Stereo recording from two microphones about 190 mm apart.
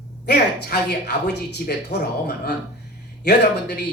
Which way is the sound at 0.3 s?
60° left (ahead or behind).